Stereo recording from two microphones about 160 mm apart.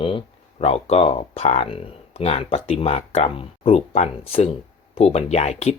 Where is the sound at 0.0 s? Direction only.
35° left (ahead or behind).